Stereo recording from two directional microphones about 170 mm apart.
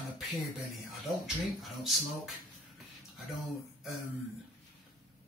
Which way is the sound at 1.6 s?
Centre (ahead or behind).